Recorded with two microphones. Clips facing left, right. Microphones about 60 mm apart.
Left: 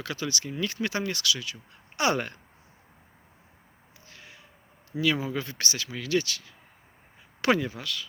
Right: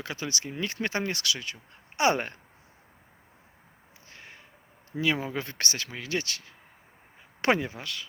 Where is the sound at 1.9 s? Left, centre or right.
Right.